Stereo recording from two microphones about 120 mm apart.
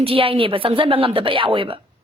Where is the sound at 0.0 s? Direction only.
50° right (ahead or behind).